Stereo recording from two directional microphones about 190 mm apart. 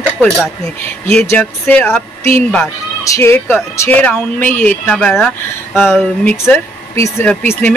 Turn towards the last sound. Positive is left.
turn(degrees=10)  # may be behind; listen again after turning